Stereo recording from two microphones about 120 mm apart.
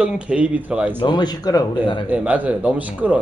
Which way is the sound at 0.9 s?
40° left (ahead or behind).